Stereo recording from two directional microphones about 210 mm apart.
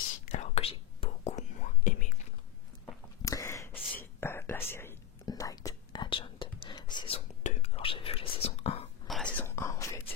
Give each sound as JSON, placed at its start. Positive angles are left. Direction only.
{"t": 0.2, "sound": "whispering", "side_deg": 30}
{"t": 3.2, "sound": "a sound", "side_deg": 15}
{"t": 4.0, "sound": "whispering", "side_deg": 10}
{"t": 9.0, "sound": "whispering", "side_deg": 5}